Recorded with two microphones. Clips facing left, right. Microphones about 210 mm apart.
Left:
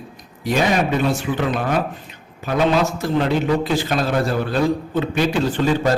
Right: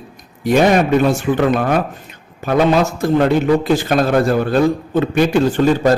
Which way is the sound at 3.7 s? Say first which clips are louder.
Right 6 dB; 50° right (ahead or behind).